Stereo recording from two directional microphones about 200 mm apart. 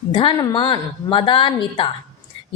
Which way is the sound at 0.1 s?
25° left (ahead or behind).